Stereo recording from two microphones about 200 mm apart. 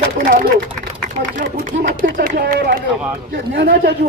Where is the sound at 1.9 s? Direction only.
55° right (ahead or behind).